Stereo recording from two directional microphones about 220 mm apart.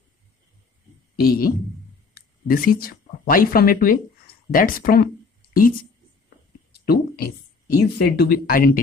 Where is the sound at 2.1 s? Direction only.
40° left (ahead or behind).